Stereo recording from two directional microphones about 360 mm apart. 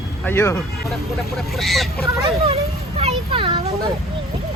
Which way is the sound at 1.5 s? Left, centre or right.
Centre.